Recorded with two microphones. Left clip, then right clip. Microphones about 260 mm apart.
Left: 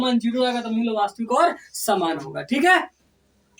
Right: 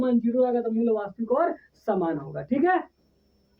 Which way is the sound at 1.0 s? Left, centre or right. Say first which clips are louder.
Left 6 dB; right.